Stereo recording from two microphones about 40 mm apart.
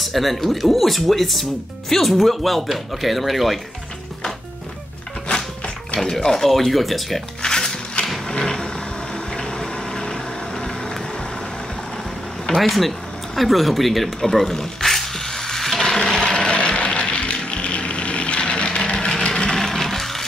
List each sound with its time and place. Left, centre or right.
0.0 s speech: centre
5.9 s speech: centre
7.4 s music: centre
8.3 s a sound: centre
9.4 s pump: centre
12.6 s speech: centre
13.4 s a sound: centre
15.9 s a sound: centre
19.2 s vehicle: left
19.5 s music: centre